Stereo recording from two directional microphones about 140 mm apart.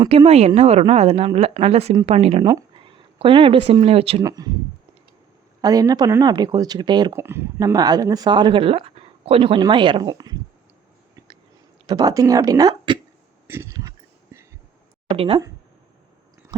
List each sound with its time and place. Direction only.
0.3 s speech: 50° right (ahead or behind)
4.2 s speech: 25° right (ahead or behind)
5.6 s speech: 25° right (ahead or behind)
7.1 s speech: 20° right (ahead or behind)
11.9 s speech: 25° right (ahead or behind)
13.5 s speech: 20° right (ahead or behind)
15.1 s speech: 45° right (ahead or behind)